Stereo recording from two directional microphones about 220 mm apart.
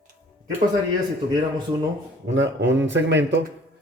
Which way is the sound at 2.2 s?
55° right (ahead or behind).